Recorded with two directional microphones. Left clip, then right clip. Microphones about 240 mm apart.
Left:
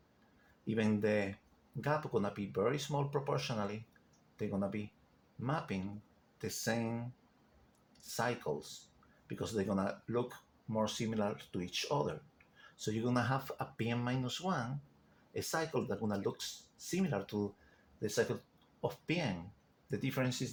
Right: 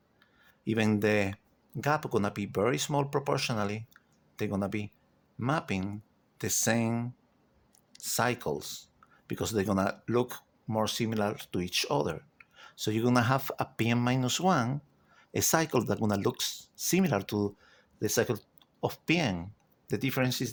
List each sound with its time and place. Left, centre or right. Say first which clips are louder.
0.6 s speech: right 6 dB; right